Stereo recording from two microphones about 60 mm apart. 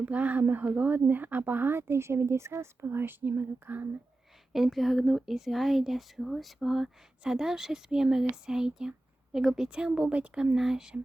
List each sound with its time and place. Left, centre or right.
0.0 s speech: right
4.5 s speech: centre